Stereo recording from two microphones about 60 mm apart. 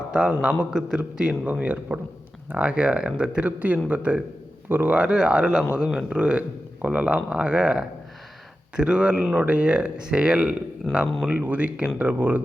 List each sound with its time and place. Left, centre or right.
0.1 s a man's voice: centre; by 4.9 s right
4.9 s a man's voice: centre